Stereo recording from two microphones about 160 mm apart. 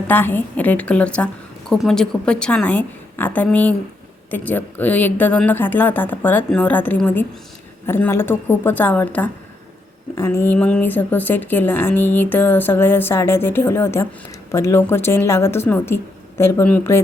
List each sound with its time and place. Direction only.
0.1 s speech: 10° left (ahead or behind)